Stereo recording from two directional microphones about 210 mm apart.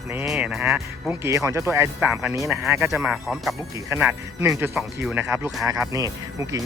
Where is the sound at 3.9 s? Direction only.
15° right (ahead or behind).